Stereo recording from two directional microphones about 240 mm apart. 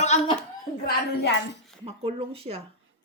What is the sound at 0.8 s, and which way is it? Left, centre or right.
Speech, left.